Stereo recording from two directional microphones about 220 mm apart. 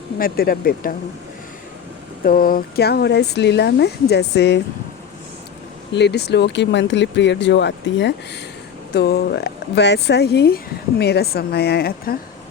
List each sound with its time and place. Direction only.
0.2 s speech: 40° left (ahead or behind)
2.2 s speech: 40° left (ahead or behind)
5.9 s speech: 50° left (ahead or behind)